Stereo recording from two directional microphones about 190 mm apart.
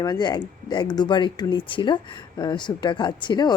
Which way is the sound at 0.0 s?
20° left (ahead or behind).